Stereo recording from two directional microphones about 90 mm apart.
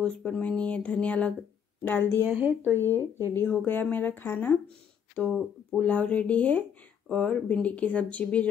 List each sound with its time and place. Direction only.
0.0 s speech: 15° left (ahead or behind)
2.2 s speech: 20° right (ahead or behind)
3.3 s speech: 25° left (ahead or behind)